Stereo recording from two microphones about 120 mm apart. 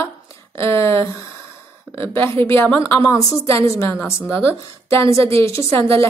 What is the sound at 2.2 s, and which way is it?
A woman's voice, 20° left (ahead or behind).